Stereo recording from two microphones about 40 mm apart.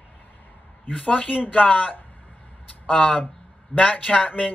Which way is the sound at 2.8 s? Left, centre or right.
Left.